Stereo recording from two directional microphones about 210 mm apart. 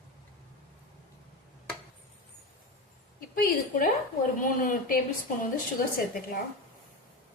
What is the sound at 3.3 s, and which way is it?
A woman's voice, 45° left (ahead or behind).